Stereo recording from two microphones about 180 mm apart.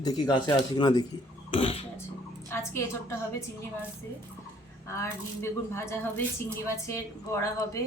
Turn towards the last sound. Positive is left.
turn(degrees=15)  # may be behind; listen again after turning